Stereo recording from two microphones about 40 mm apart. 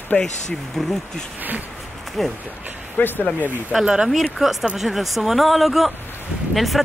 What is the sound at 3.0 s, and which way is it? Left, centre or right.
Speech, left.